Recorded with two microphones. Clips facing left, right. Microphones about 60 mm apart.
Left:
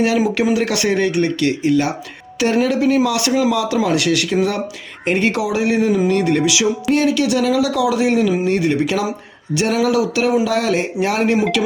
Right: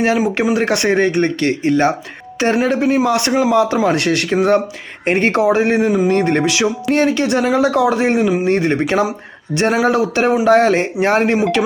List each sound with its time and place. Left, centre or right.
0.5 s a man's voice: right